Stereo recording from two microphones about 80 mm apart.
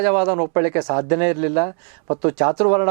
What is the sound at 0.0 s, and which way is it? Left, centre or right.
Speech, centre.